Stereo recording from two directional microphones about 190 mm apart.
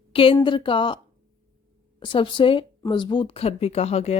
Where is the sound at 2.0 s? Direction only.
25° left (ahead or behind).